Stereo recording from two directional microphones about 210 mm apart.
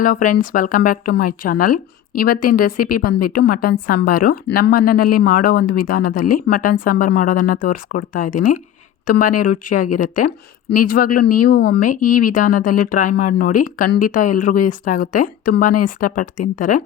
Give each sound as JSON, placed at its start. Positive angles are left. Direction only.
{"t": 0.0, "sound": "speech", "side_deg": 40}